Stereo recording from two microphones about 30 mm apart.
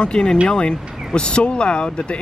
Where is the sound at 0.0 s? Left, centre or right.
Left.